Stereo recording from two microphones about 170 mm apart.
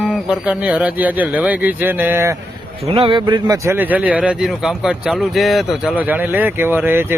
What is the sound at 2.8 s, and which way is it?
Speech, 35° right (ahead or behind).